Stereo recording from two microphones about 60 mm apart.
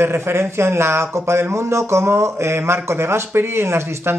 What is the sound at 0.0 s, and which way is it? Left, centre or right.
Speech, right.